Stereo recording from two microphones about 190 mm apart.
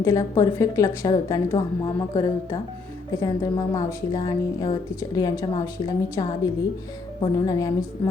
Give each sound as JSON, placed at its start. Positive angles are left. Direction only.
{"t": 0.0, "sound": "a woman's voice", "side_deg": 20}